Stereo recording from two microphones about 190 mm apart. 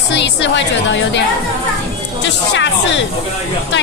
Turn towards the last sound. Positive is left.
turn(degrees=70)  # may be behind; listen again after turning